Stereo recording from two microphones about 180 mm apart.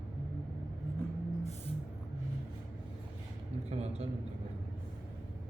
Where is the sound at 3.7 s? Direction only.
35° right (ahead or behind).